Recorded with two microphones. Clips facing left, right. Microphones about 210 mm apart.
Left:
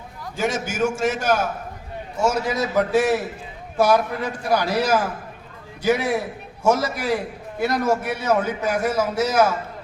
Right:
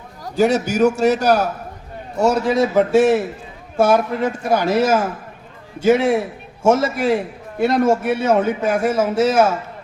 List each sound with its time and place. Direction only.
0.2 s a man's voice: 40° right (ahead or behind)
2.5 s a man's voice: 25° right (ahead or behind)